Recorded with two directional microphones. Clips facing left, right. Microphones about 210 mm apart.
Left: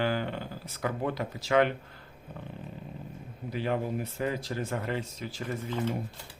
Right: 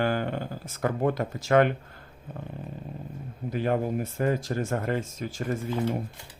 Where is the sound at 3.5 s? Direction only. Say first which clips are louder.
Right 4 dB; 50° right (ahead or behind).